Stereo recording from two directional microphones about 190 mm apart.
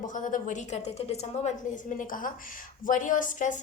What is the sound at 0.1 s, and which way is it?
Speech, 45° left (ahead or behind).